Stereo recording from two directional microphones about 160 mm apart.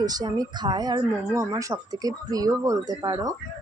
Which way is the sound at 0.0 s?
25° right (ahead or behind).